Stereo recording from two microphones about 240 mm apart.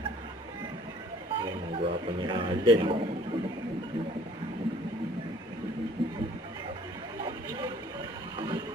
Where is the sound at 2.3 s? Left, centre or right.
Centre.